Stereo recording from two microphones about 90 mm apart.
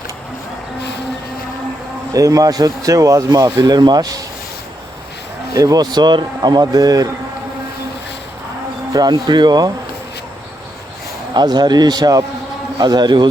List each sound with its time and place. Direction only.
2.1 s speech: 40° right (ahead or behind)
5.5 s speech: 45° right (ahead or behind)
8.9 s speech: 45° right (ahead or behind)
11.3 s speech: 50° right (ahead or behind)